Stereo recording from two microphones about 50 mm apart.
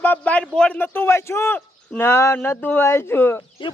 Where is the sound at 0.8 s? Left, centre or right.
Left.